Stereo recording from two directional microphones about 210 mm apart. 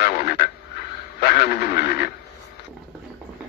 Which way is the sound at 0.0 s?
45° left (ahead or behind).